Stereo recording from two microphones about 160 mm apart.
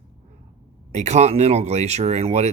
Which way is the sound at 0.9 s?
45° right (ahead or behind).